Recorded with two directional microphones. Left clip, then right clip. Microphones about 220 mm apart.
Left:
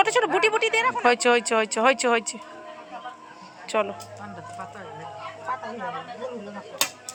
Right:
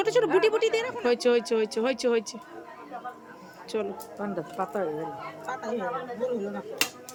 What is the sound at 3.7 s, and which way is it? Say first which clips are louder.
Speech: left 6 dB; 5° right (ahead or behind).